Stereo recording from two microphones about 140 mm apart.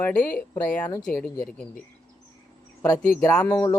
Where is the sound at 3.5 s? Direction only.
20° left (ahead or behind).